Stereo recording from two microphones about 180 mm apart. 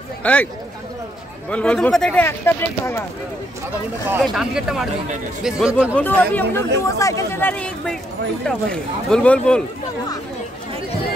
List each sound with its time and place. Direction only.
0.2 s speech: 10° left (ahead or behind)
1.5 s speech: 5° left (ahead or behind)
4.2 s speech: centre (ahead or behind)
5.9 s speech: 10° left (ahead or behind)